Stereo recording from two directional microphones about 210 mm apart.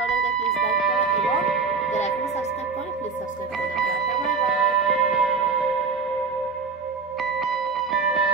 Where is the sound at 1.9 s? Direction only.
30° left (ahead or behind).